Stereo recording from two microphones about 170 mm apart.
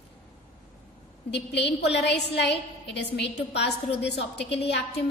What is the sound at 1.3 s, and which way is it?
A woman's voice, 80° left.